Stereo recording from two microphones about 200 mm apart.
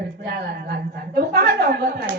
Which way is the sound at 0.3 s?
55° right (ahead or behind).